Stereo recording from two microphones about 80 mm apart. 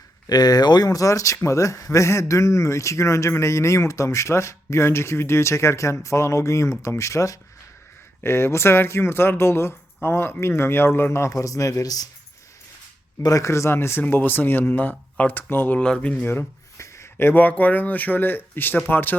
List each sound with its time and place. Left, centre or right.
0.3 s speech: left
13.2 s speech: left
15.8 s speech: centre
16.2 s speech: left
16.7 s speech: left